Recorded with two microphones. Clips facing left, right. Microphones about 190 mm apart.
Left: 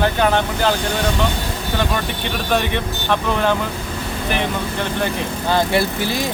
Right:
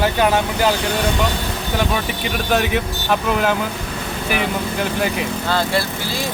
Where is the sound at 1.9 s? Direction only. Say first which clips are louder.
Right 1 dB; 5° right (ahead or behind).